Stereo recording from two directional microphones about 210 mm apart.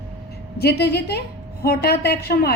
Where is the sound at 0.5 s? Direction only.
50° left (ahead or behind).